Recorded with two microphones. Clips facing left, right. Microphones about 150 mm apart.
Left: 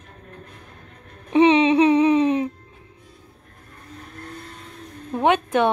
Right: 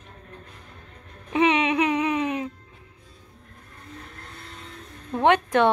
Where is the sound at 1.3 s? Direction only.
25° left (ahead or behind).